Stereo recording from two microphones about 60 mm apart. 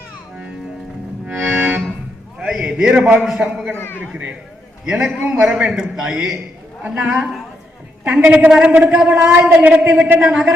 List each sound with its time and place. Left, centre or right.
1.3 s accordion: right
2.4 s a sound: centre
3.4 s a man's voice: centre
3.8 s a man's voice: left
5.3 s a man's voice: centre
8.7 s a man's voice: right
9.0 s a man's voice: centre
10.2 s a man's voice: centre